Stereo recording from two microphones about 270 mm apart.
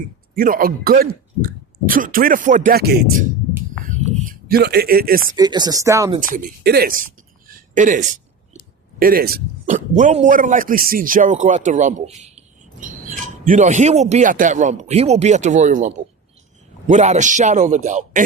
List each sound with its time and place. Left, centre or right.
0.3 s speech: right
3.8 s a sound: right
5.4 s speech: centre
6.1 s speech: right
7.4 s a sound: right
9.0 s a man's voice: right